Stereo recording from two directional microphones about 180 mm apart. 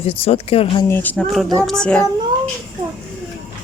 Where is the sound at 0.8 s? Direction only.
10° left (ahead or behind).